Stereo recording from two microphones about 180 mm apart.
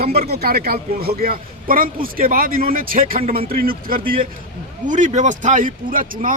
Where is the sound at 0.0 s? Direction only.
60° right (ahead or behind).